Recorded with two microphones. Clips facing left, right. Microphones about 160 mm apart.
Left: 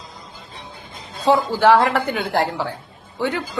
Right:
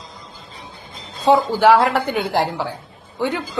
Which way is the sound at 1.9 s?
20° right (ahead or behind).